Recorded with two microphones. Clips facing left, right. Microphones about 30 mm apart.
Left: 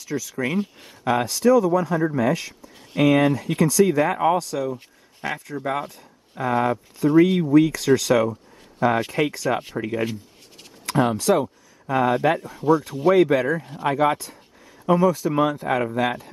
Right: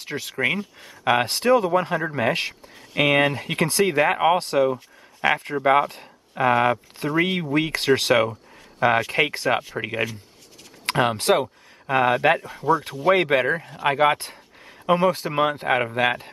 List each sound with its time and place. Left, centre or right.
0.0 s speech: right
5.2 s speech: right